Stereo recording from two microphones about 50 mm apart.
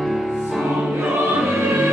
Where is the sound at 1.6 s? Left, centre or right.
Right.